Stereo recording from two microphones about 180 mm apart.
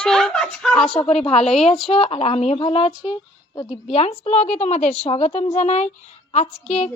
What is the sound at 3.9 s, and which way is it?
A woman's voice, 35° left (ahead or behind).